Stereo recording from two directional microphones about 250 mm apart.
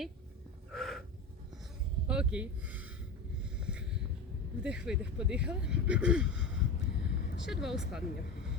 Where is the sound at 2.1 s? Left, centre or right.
Centre.